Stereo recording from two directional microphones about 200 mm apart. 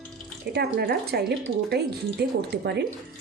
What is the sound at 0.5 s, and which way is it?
Speech, 55° right (ahead or behind).